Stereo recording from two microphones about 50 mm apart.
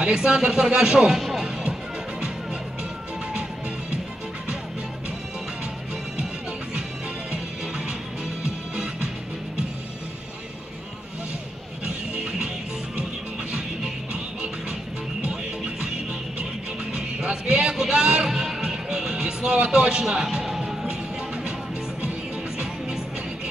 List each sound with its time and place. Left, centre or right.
0.0 s speech: centre
1.2 s music: centre
8.7 s music: centre
11.8 s music: centre
16.9 s music: centre